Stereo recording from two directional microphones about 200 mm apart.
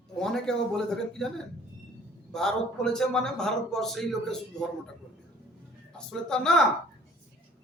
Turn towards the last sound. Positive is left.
turn(degrees=5)  # may be behind; listen again after turning